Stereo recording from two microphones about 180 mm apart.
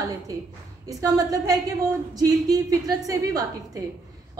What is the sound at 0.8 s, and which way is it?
A woman's voice, 20° right (ahead or behind).